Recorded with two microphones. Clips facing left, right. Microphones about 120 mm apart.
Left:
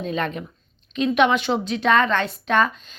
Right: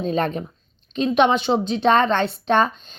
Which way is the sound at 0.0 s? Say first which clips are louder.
Right 4 dB; 35° right (ahead or behind).